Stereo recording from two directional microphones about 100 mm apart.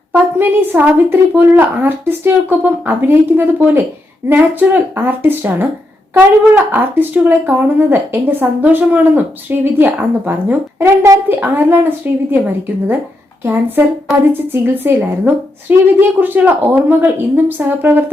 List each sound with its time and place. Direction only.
0.1 s speech: 20° right (ahead or behind)